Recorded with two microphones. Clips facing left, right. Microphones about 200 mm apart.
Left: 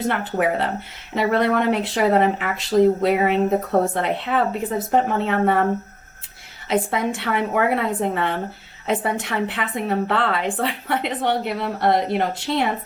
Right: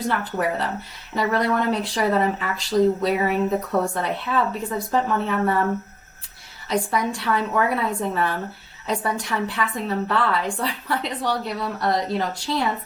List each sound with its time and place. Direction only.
0.0 s a woman's voice: 25° left (ahead or behind)
6.7 s a woman's voice: 25° left (ahead or behind)